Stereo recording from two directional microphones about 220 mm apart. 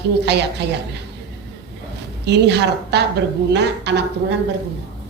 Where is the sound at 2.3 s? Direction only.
50° right (ahead or behind).